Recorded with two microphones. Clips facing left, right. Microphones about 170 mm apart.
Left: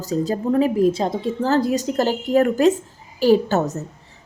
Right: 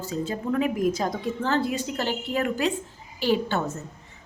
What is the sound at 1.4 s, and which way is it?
A woman's voice, 40° left (ahead or behind).